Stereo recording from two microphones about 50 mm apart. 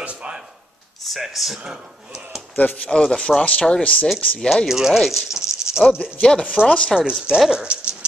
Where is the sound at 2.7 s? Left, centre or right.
Left.